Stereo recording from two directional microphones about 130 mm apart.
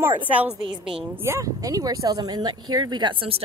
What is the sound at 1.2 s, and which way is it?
Speech, 20° right (ahead or behind).